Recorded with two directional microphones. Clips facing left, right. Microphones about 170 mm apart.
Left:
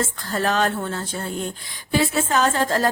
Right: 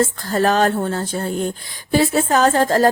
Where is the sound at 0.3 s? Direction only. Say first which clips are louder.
Right 4 dB; 40° right (ahead or behind).